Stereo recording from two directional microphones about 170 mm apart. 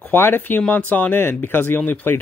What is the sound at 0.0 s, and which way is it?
Speech, 10° left (ahead or behind).